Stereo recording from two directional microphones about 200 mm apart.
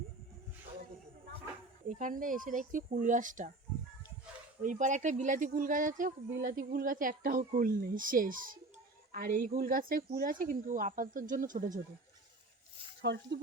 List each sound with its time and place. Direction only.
2.0 s speech: 40° right (ahead or behind)
4.6 s speech: 40° right (ahead or behind)
13.0 s speech: 60° right (ahead or behind)